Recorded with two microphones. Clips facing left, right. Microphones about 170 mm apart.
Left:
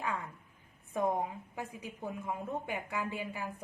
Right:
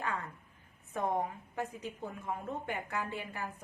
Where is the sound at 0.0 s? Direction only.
10° left (ahead or behind).